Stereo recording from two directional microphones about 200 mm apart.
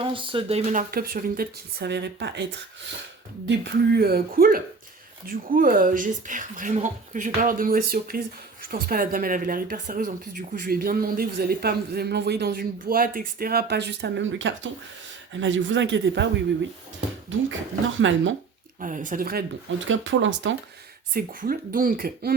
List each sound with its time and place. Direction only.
0.0 s speech: 25° right (ahead or behind); by 16.3 s 65° right (ahead or behind)
18.0 s speech: 70° right (ahead or behind)
18.8 s speech: 40° right (ahead or behind)
19.9 s speech: 70° right (ahead or behind)
21.1 s speech: 45° right (ahead or behind)